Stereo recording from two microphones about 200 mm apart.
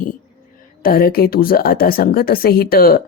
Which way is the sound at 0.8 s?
45° left (ahead or behind).